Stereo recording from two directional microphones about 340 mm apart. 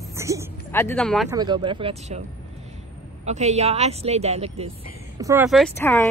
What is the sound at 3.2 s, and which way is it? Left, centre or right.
Speech, centre.